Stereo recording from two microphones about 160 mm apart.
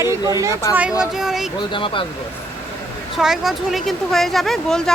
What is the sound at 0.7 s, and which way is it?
Speech, 5° right (ahead or behind).